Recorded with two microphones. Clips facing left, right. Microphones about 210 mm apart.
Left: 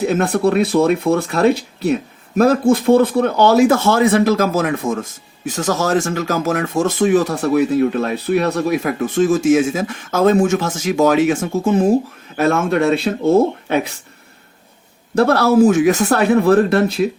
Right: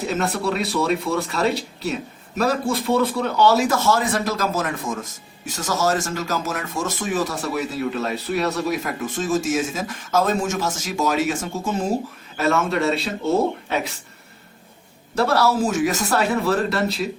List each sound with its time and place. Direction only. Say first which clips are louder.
0.1 s speech: left 5 dB; 55° left (ahead or behind)
15.1 s speech: left 6 dB; 55° left (ahead or behind)